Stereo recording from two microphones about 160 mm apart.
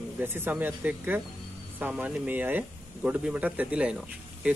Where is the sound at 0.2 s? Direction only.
15° right (ahead or behind).